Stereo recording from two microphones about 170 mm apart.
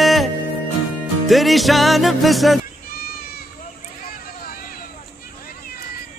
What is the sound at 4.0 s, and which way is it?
Vehicle, 55° left (ahead or behind).